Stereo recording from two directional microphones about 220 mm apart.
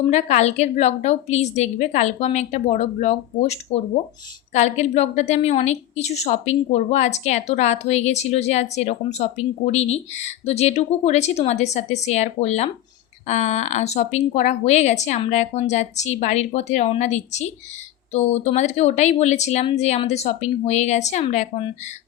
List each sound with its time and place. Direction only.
0.1 s a woman's voice: 30° left (ahead or behind)